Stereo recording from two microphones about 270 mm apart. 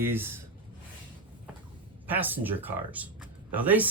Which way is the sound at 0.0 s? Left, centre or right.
Centre.